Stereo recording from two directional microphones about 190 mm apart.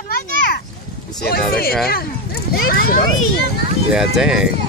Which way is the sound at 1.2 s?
55° left (ahead or behind).